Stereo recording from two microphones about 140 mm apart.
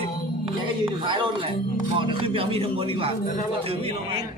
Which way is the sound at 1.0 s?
35° right (ahead or behind).